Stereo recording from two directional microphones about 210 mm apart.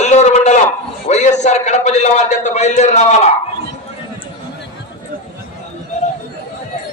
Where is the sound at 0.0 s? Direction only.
35° left (ahead or behind).